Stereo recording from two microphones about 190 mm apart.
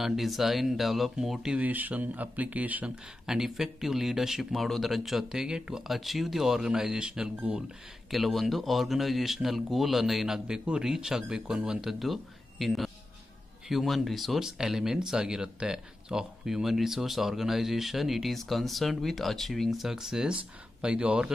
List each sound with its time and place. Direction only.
0.0 s speech: centre (ahead or behind)